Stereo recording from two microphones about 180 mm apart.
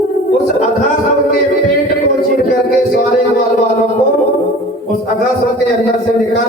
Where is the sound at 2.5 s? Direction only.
55° left (ahead or behind).